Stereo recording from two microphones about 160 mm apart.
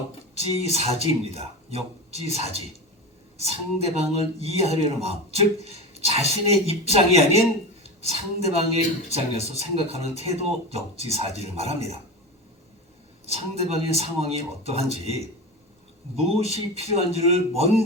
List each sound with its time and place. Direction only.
0.3 s speech: 40° right (ahead or behind)
13.2 s speech: 40° right (ahead or behind)